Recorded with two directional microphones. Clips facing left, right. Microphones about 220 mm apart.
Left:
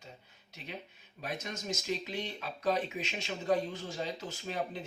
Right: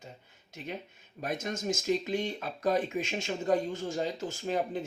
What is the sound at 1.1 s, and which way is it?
Speech, 50° right (ahead or behind).